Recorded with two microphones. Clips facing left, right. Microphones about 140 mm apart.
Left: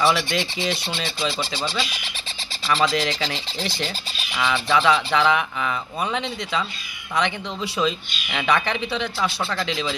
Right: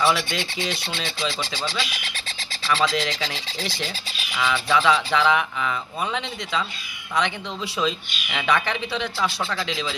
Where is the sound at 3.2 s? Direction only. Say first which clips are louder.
Left 2 dB; 5° right (ahead or behind).